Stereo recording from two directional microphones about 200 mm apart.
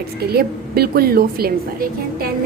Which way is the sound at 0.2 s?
50° right (ahead or behind).